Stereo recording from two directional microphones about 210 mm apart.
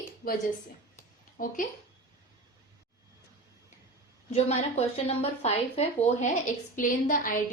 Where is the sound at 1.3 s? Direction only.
40° left (ahead or behind).